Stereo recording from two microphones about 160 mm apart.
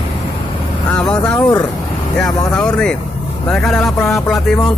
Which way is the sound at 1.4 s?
25° left (ahead or behind).